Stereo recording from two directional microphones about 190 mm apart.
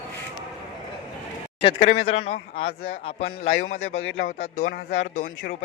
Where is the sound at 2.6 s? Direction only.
50° left (ahead or behind).